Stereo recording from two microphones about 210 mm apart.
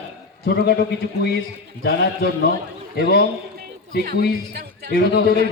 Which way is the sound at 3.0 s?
50° left (ahead or behind).